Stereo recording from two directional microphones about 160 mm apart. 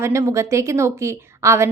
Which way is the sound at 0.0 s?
20° right (ahead or behind).